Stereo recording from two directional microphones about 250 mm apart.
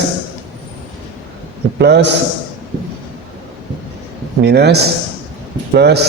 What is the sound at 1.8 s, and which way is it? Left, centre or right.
Speech, right.